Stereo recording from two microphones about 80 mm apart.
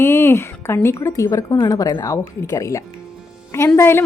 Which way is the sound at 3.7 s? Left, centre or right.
Left.